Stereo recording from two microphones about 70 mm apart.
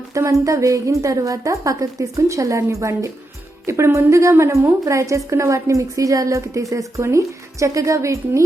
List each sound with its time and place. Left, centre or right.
0.3 s a woman's voice: right